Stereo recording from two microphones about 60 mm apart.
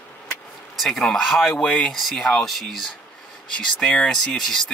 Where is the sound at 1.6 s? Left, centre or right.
Centre.